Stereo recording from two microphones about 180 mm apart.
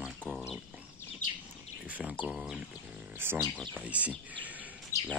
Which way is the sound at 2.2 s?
5° right (ahead or behind).